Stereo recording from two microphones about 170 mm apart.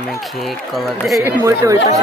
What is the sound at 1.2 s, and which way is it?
Speech, 15° right (ahead or behind).